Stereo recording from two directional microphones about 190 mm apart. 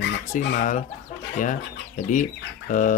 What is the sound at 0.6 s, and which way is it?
Speech, 40° left (ahead or behind).